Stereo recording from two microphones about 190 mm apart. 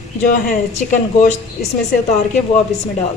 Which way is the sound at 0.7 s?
40° left (ahead or behind).